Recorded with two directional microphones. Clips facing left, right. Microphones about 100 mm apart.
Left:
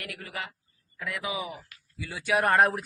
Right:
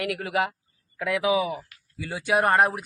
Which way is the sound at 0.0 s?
90° right.